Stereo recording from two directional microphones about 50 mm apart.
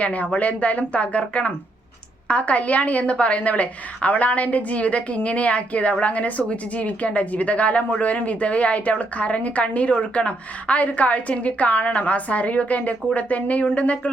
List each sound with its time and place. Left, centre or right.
0.0 s a woman's voice: left